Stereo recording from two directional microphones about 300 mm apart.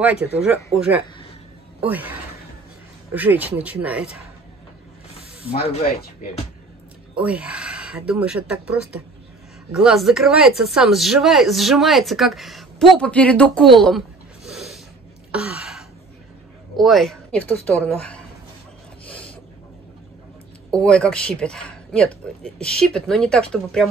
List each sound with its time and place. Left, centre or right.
0.0 s speech: centre
1.8 s speech: centre
5.5 s speech: left
7.2 s speech: centre
13.7 s a sound: centre
16.7 s speech: centre
19.0 s a sound: centre
20.7 s speech: centre